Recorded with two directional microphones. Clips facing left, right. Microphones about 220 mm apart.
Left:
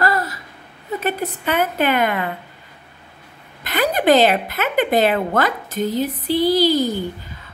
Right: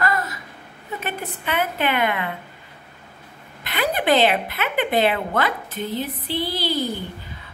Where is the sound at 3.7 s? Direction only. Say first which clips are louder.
Left 5 dB; 45° left (ahead or behind).